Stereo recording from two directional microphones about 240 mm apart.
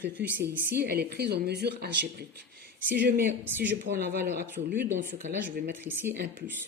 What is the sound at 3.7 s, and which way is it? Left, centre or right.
Speech, right.